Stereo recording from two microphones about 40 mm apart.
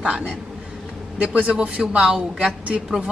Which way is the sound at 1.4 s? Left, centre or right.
Right.